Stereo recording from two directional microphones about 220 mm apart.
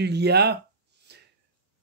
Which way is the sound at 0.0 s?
50° right (ahead or behind).